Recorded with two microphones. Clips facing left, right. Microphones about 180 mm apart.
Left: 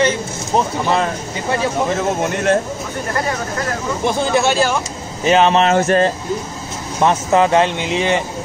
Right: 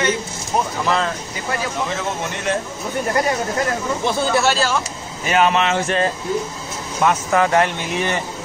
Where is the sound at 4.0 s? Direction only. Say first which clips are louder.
Left 3 dB; 15° left (ahead or behind).